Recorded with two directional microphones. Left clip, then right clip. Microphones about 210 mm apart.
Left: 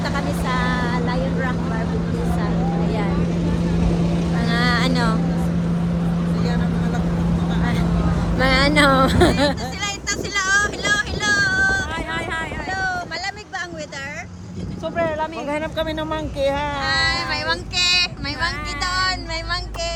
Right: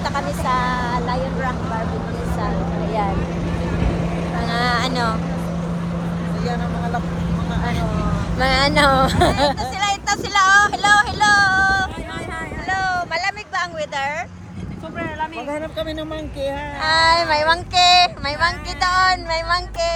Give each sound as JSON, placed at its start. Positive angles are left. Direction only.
{"t": 0.0, "sound": "vehicle", "side_deg": 5}
{"t": 4.4, "sound": "vehicle", "side_deg": 5}
{"t": 6.4, "sound": "vehicle", "side_deg": -15}
{"t": 8.4, "sound": "vehicle", "side_deg": 10}
{"t": 12.6, "sound": "a sound", "side_deg": -25}
{"t": 14.9, "sound": "a sound", "side_deg": 40}
{"t": 15.4, "sound": "speech", "side_deg": -10}
{"t": 16.4, "sound": "child singing", "side_deg": 5}